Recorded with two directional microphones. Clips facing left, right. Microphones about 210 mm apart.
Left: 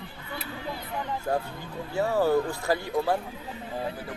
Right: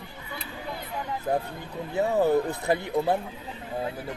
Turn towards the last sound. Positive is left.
turn(degrees=-20)  # may be behind; listen again after turning